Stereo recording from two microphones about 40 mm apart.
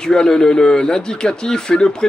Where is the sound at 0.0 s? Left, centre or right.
Centre.